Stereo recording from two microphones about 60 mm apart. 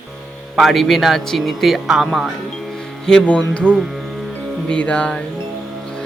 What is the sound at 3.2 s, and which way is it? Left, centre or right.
Speech, centre.